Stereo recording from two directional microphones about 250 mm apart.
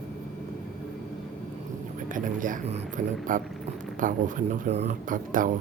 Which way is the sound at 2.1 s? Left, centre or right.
Right.